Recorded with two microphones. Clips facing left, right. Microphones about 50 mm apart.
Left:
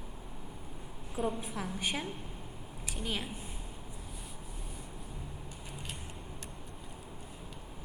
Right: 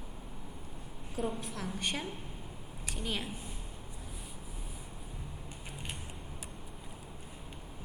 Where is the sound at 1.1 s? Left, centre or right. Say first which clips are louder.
Left 2 dB; centre.